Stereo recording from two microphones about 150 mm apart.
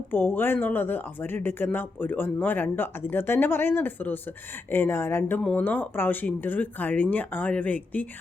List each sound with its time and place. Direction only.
0.1 s speech: 15° left (ahead or behind)